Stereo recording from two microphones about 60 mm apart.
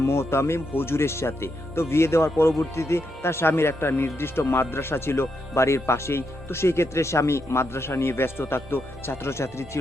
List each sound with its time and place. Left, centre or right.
0.0 s speech: left